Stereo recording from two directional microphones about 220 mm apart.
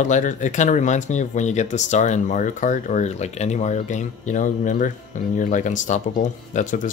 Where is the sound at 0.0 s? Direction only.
35° left (ahead or behind).